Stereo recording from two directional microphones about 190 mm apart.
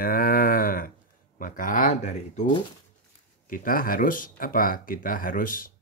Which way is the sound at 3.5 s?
50° left (ahead or behind).